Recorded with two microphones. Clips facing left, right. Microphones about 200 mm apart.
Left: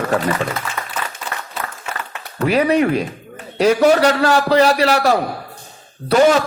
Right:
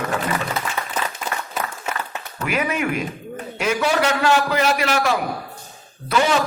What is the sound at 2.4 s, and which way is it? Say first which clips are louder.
Speech: left 8 dB; 35° left (ahead or behind).